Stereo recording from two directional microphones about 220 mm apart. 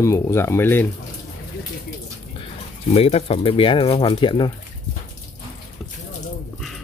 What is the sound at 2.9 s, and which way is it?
Speech, 30° left (ahead or behind).